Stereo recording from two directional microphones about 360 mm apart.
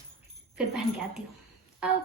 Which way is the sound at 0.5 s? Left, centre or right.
Centre.